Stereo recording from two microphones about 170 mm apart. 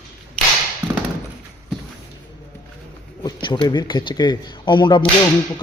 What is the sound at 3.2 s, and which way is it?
Speech, 25° left (ahead or behind).